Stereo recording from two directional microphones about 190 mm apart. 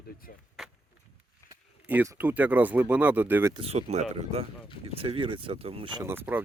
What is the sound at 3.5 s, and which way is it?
Speech, 30° right (ahead or behind).